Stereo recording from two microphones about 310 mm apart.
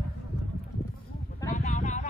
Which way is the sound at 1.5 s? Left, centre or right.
Left.